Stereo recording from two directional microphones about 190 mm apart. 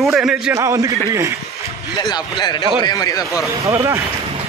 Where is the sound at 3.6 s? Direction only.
15° right (ahead or behind).